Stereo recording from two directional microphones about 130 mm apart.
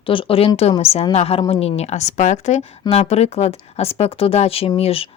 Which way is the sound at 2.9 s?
55° left (ahead or behind).